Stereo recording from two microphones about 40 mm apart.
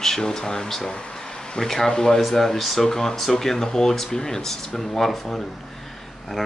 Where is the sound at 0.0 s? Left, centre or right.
Centre.